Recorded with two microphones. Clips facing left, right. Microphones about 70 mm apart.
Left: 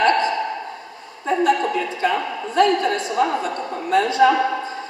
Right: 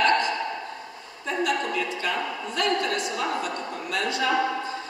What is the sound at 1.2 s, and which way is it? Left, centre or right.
A woman's voice, left.